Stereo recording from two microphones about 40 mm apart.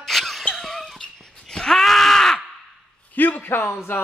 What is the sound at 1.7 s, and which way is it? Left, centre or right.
Groan, centre.